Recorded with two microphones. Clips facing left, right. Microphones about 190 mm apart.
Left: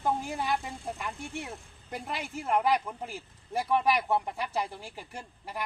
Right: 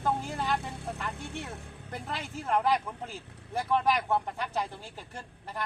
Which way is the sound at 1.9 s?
10° left (ahead or behind).